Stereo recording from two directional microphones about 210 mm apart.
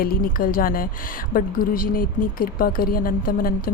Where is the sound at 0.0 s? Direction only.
45° left (ahead or behind).